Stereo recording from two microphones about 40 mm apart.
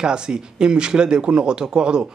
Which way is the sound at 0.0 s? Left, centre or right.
Right.